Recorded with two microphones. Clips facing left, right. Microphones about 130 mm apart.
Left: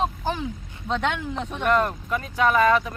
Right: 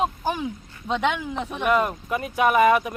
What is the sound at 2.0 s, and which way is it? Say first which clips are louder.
Speech: right 1 dB; 20° right (ahead or behind).